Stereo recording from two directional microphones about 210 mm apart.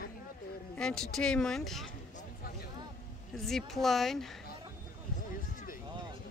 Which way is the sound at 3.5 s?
Centre (ahead or behind).